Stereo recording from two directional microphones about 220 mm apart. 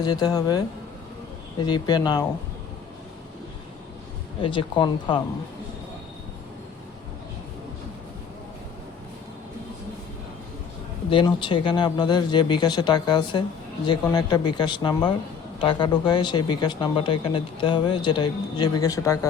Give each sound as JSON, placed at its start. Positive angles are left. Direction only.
{"t": 0.0, "sound": "speech", "side_deg": 20}
{"t": 1.6, "sound": "speech", "side_deg": 20}
{"t": 4.4, "sound": "speech", "side_deg": 20}
{"t": 11.1, "sound": "speech", "side_deg": 20}